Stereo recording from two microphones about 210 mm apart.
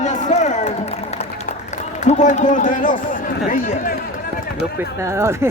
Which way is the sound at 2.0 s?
35° left (ahead or behind).